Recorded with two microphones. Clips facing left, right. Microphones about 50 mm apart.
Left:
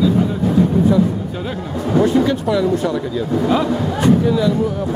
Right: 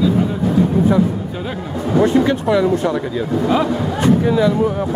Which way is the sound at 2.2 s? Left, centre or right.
Centre.